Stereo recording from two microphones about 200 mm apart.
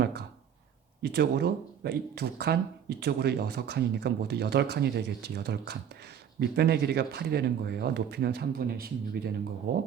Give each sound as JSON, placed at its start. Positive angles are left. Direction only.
{"t": 0.0, "sound": "speech", "side_deg": -55}